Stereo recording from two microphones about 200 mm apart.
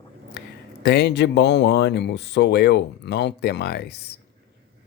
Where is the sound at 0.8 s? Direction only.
55° left (ahead or behind).